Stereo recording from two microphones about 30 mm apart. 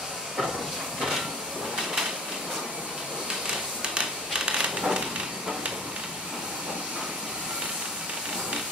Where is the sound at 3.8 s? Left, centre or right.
Right.